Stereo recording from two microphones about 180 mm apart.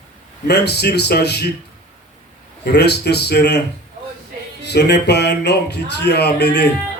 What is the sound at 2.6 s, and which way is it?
Speech, 65° left (ahead or behind).